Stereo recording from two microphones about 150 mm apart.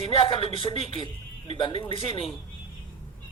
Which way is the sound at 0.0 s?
40° left (ahead or behind).